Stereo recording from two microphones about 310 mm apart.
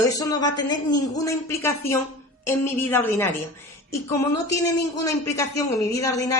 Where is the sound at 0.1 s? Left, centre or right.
Centre.